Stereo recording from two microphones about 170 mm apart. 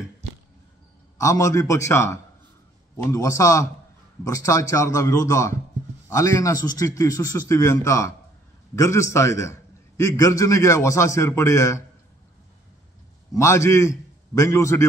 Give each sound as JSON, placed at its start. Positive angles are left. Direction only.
{"t": 1.1, "sound": "a man's voice", "side_deg": 20}
{"t": 13.3, "sound": "a man's voice", "side_deg": 15}